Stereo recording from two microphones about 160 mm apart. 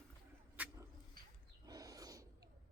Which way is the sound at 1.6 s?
25° right (ahead or behind).